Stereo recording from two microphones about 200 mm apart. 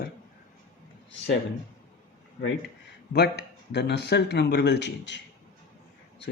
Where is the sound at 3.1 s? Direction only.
55° left (ahead or behind).